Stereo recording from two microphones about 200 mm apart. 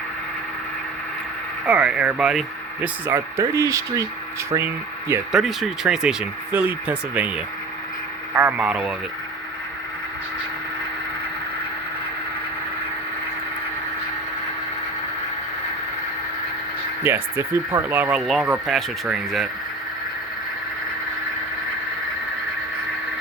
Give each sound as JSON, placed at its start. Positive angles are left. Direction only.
{"t": 1.6, "sound": "speech", "side_deg": -5}
{"t": 5.3, "sound": "speech", "side_deg": 0}
{"t": 8.4, "sound": "speech", "side_deg": -10}
{"t": 17.0, "sound": "speech", "side_deg": -10}